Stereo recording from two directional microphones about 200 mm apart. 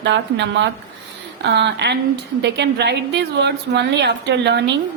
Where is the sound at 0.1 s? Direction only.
65° right (ahead or behind).